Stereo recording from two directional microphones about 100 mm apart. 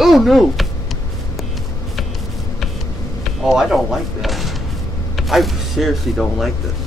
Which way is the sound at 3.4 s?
5° right (ahead or behind).